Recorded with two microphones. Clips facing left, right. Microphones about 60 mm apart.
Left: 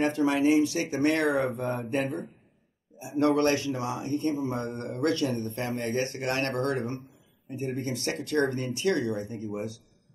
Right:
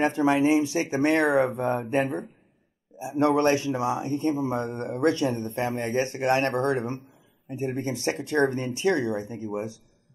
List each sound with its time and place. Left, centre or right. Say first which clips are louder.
0.0 s speech: right 2 dB; right